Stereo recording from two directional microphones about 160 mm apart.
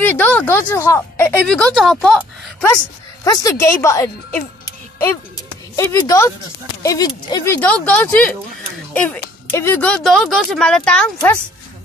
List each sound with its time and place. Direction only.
0.0 s speech: 10° left (ahead or behind)
3.3 s speech: 20° left (ahead or behind)
7.4 s speech: 10° left (ahead or behind)